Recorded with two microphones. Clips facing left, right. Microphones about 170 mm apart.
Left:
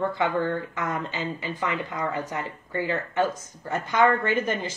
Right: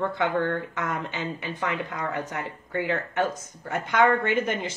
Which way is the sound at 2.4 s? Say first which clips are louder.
Right 1 dB; 25° right (ahead or behind).